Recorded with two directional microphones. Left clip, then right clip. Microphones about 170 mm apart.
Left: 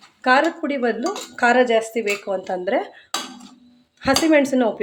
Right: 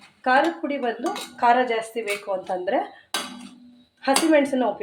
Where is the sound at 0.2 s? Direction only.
50° left (ahead or behind).